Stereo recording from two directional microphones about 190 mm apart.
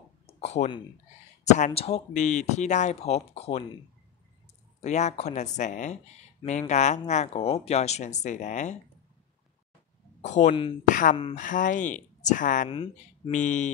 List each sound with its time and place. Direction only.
0.3 s a sound: 35° left (ahead or behind)
1.4 s speech: 35° left (ahead or behind)
4.7 s speech: 35° left (ahead or behind)
10.2 s speech: 40° left (ahead or behind)
10.5 s speech: 25° left (ahead or behind)
10.8 s speech: 45° left (ahead or behind)
12.6 s speech: 25° left (ahead or behind)
13.3 s speech: 40° left (ahead or behind)